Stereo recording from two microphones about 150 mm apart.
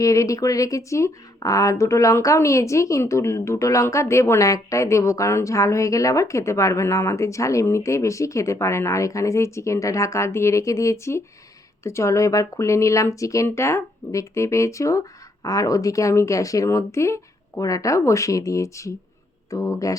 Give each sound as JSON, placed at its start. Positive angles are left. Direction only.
{"t": 0.0, "sound": "speech", "side_deg": 20}